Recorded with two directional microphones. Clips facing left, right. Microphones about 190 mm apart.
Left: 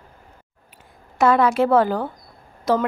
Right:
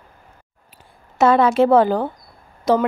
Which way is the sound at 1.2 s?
25° right (ahead or behind).